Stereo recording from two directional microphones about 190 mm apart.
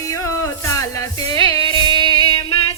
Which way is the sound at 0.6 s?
15° left (ahead or behind).